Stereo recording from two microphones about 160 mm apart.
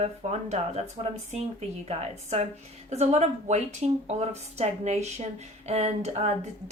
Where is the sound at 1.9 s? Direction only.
40° right (ahead or behind).